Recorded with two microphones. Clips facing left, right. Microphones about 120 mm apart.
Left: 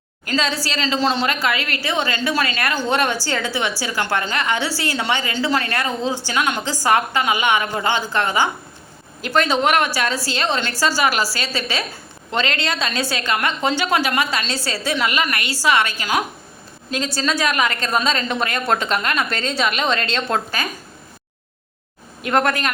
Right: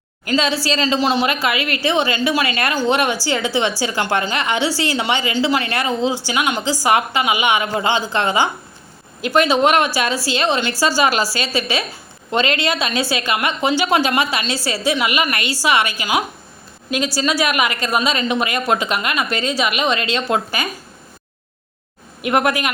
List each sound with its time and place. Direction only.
0.3 s a woman's voice: 15° right (ahead or behind)
0.9 s a woman's voice: 10° right (ahead or behind)
22.2 s a woman's voice: 15° right (ahead or behind)